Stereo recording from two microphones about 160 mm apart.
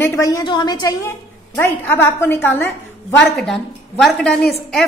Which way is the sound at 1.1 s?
15° left (ahead or behind).